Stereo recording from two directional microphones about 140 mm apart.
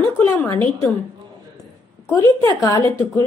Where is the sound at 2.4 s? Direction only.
25° left (ahead or behind).